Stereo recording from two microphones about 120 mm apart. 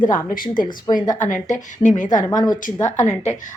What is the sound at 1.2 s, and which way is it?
A woman's voice, 90° left.